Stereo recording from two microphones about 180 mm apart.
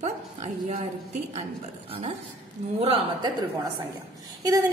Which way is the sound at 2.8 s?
30° right (ahead or behind).